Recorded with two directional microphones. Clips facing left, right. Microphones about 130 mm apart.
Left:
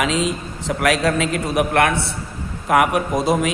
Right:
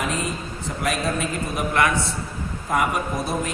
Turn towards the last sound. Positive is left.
turn(degrees=90)